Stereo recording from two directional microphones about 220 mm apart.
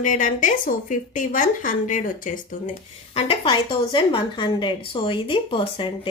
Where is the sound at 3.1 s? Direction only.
25° left (ahead or behind).